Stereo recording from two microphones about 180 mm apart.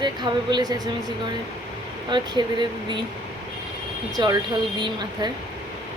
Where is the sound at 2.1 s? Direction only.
25° right (ahead or behind).